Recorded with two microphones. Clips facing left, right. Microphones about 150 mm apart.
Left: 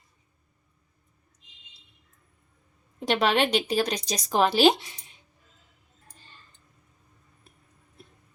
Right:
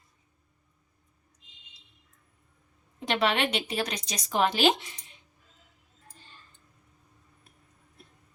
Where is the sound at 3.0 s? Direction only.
35° left (ahead or behind).